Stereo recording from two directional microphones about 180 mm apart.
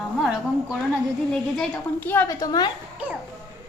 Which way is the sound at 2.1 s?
15° left (ahead or behind).